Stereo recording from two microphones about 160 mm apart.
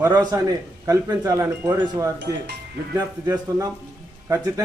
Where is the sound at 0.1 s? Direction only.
20° right (ahead or behind).